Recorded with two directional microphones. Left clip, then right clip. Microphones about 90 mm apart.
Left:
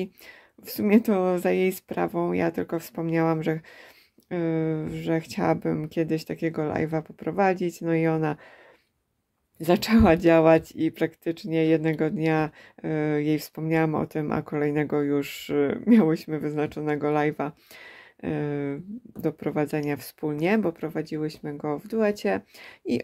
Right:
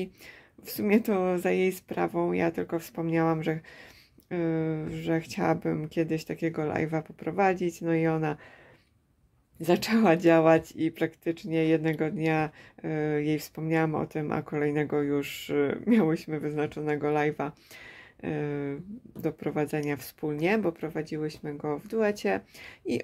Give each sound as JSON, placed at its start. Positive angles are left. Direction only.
{"t": 0.7, "sound": "speech", "side_deg": 35}
{"t": 9.6, "sound": "speech", "side_deg": 40}